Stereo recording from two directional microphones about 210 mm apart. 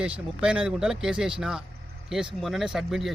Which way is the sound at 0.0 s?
5° right (ahead or behind).